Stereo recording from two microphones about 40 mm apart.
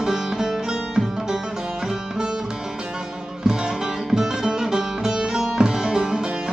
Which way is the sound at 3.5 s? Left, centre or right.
Centre.